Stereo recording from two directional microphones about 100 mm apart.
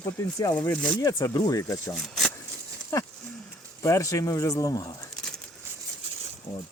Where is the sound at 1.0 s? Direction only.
35° left (ahead or behind).